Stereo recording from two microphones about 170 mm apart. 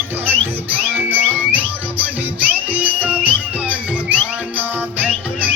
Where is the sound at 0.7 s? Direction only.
10° right (ahead or behind).